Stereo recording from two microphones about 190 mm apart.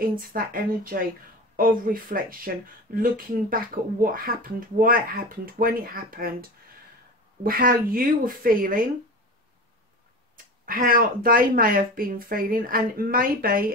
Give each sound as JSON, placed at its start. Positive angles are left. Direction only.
{"t": 0.1, "sound": "speech", "side_deg": -50}
{"t": 7.4, "sound": "speech", "side_deg": -50}
{"t": 10.3, "sound": "speech", "side_deg": -45}